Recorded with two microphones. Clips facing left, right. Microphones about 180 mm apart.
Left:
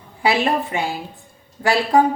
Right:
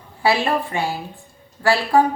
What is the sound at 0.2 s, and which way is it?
A woman's voice, 20° left (ahead or behind).